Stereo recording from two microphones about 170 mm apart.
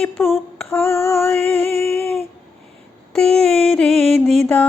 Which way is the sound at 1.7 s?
40° right (ahead or behind).